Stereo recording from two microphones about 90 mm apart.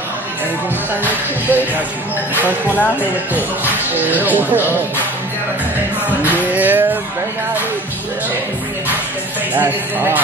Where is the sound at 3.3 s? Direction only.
20° right (ahead or behind).